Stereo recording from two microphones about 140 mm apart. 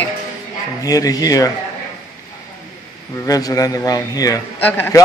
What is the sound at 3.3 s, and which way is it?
A man's voice, 25° left (ahead or behind).